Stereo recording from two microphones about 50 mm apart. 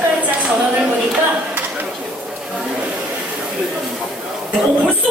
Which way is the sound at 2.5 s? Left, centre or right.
Right.